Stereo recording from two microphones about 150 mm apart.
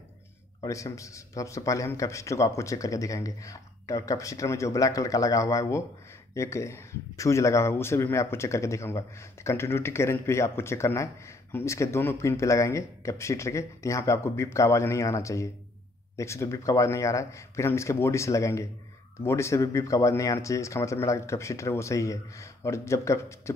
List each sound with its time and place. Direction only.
0.6 s speech: 20° left (ahead or behind)